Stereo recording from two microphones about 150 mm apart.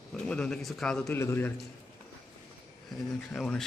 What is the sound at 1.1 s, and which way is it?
Speech, 15° left (ahead or behind).